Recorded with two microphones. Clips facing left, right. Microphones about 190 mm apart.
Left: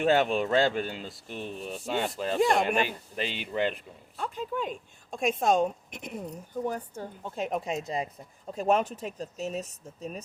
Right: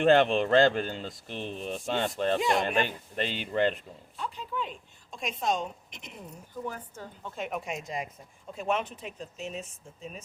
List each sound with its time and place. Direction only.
0.0 s speech: 5° left (ahead or behind)
4.2 s a woman's voice: 45° left (ahead or behind)